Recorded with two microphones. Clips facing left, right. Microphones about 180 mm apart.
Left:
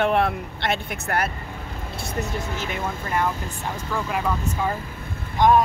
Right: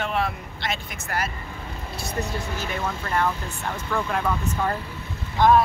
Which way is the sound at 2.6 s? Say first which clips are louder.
Even; 15° left (ahead or behind).